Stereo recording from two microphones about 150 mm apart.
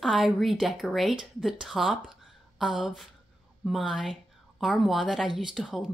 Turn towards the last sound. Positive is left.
turn(degrees=0)  # may be behind; listen again after turning